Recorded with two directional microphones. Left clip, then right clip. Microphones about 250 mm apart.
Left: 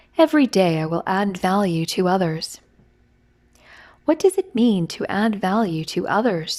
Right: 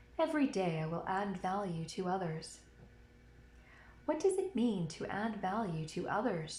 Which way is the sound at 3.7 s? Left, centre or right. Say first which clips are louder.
Left 16 dB; left.